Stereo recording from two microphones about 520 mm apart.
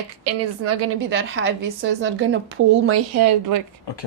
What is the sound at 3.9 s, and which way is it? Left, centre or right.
Speech, left.